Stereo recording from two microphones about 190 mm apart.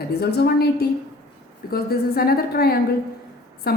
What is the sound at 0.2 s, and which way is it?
A woman's voice, 55° left (ahead or behind).